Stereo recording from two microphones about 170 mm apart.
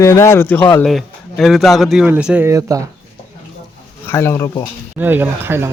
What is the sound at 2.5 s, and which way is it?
Speech, 20° right (ahead or behind).